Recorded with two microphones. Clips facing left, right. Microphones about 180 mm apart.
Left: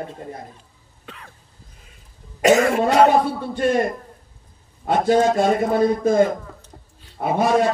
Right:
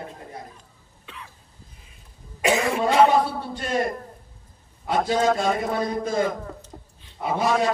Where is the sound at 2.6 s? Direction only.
45° left (ahead or behind).